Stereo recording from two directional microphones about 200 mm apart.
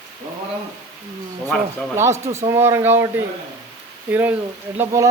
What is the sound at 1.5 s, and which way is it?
Speech, 5° left (ahead or behind).